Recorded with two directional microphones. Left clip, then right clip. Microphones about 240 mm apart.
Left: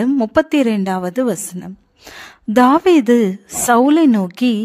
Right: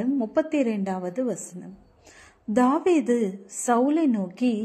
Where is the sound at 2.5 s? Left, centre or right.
Left.